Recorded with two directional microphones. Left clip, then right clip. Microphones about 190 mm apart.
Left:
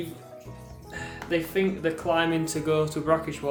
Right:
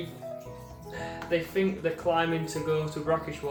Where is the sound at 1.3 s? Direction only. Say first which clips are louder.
Left 2 dB; 60° left (ahead or behind).